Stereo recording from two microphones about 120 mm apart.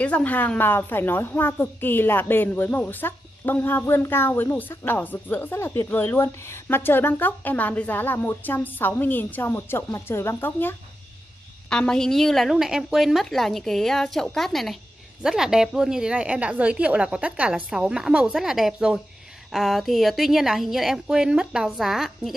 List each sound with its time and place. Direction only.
0.0 s a woman's voice: 10° left (ahead or behind)
11.7 s a woman's voice: 5° left (ahead or behind)